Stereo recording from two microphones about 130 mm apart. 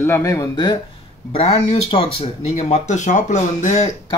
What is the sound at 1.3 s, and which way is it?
Speech, 50° left (ahead or behind).